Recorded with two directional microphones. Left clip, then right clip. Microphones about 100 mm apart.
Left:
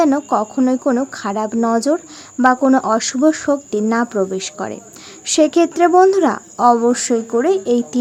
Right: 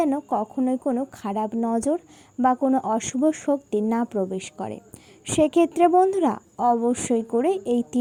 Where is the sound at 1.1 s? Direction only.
25° right (ahead or behind).